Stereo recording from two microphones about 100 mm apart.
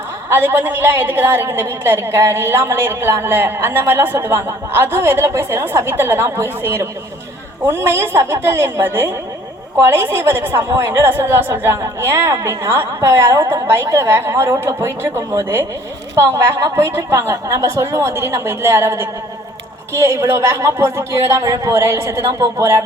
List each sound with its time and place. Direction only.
0.3 s a woman's voice: 20° right (ahead or behind)